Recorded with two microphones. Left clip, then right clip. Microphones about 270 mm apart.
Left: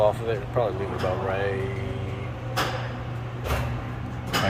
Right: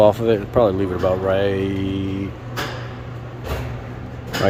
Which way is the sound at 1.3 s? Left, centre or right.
Right.